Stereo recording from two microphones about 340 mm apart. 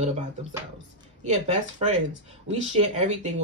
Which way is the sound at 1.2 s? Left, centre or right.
Centre.